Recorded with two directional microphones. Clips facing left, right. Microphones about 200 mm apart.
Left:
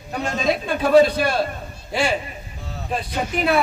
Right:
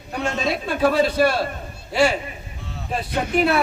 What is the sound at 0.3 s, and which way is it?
Speech, 45° left (ahead or behind).